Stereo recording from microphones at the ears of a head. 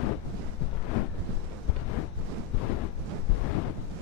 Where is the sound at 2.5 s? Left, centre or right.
Left.